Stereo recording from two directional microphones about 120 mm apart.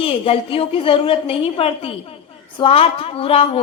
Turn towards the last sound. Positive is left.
turn(degrees=55)  # may be behind; listen again after turning